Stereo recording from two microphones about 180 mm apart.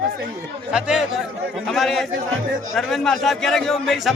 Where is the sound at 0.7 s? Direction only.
5° right (ahead or behind).